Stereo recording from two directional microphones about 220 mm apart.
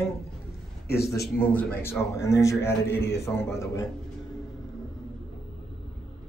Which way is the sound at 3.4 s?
15° left (ahead or behind).